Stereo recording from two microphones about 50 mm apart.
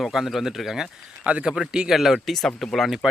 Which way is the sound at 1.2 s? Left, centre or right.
Right.